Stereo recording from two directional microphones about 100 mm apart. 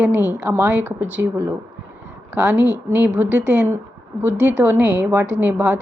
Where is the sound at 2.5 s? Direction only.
30° left (ahead or behind).